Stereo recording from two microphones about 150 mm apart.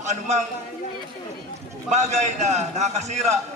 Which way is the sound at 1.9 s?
50° right (ahead or behind).